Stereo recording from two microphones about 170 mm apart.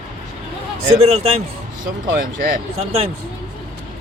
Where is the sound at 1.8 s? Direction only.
55° right (ahead or behind).